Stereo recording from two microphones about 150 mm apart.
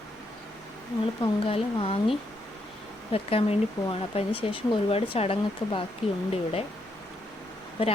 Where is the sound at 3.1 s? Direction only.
40° left (ahead or behind).